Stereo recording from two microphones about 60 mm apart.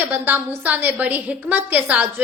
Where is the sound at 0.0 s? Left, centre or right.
Right.